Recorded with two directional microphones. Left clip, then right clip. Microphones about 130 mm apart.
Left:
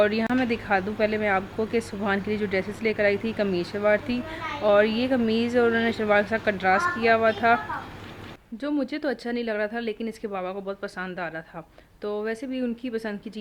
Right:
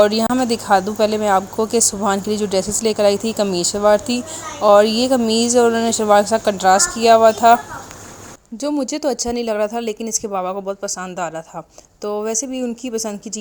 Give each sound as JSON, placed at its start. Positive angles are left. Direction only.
{"t": 0.0, "sound": "speech", "side_deg": -40}
{"t": 8.9, "sound": "speech", "side_deg": -40}
{"t": 12.0, "sound": "speech", "side_deg": -35}